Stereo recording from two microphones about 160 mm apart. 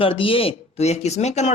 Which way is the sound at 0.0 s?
35° left (ahead or behind).